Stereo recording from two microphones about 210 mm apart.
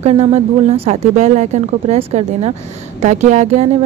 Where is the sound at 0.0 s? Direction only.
30° right (ahead or behind).